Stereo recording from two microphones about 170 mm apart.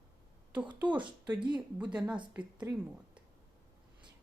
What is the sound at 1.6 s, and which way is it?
Speech, 5° right (ahead or behind).